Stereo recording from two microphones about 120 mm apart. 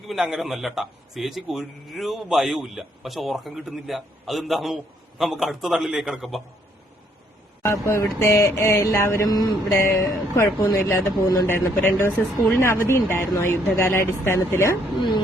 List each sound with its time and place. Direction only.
0.1 s a man's voice: centre (ahead or behind)
7.6 s speech: 20° left (ahead or behind)